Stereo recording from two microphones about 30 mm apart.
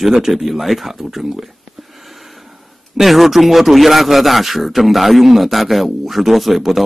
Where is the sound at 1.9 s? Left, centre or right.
Centre.